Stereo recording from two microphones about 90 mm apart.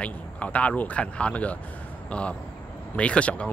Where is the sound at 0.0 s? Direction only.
15° left (ahead or behind).